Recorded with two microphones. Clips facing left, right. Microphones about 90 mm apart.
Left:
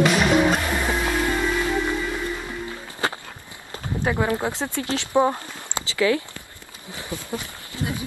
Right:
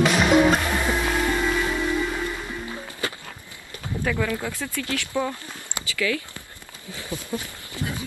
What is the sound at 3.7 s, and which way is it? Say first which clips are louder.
Speech: left 2 dB; 25° left (ahead or behind).